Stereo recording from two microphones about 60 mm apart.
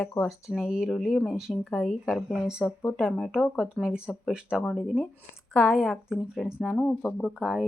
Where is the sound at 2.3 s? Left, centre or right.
Centre.